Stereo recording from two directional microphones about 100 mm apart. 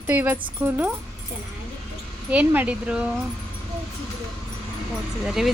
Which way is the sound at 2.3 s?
15° right (ahead or behind).